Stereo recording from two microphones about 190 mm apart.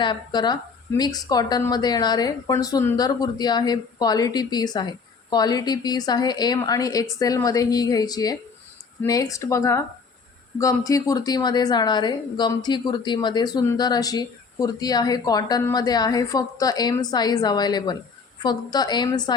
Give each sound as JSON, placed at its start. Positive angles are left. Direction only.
{"t": 0.0, "sound": "a woman's voice", "side_deg": 25}